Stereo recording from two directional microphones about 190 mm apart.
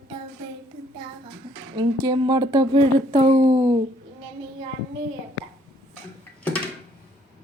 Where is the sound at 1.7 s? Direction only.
20° right (ahead or behind).